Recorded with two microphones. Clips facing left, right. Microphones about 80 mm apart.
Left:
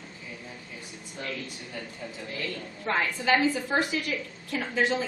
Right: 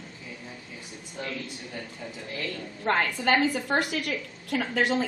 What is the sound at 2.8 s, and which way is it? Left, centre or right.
A woman's voice, right.